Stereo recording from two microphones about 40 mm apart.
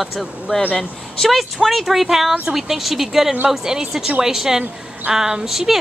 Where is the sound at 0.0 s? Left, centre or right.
Centre.